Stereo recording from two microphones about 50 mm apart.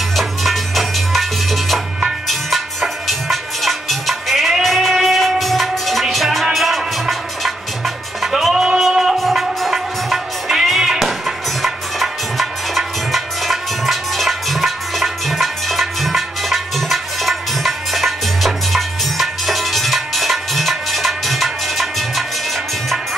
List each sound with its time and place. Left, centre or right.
0.1 s music: centre